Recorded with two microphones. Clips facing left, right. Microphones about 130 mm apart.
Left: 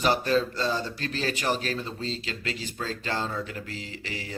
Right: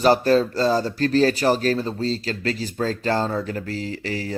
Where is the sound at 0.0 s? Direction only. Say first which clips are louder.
Right 7 dB; 40° right (ahead or behind).